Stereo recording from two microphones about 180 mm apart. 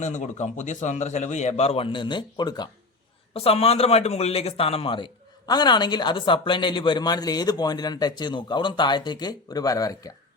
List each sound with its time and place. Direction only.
0.0 s a man's voice: 40° left (ahead or behind); by 2.6 s 25° left (ahead or behind)
3.3 s a man's voice: 35° left (ahead or behind)